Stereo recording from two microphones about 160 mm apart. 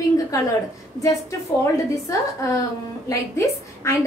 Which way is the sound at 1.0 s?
20° left (ahead or behind).